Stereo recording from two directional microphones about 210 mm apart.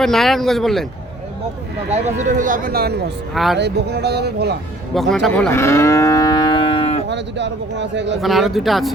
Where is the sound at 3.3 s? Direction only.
Centre (ahead or behind).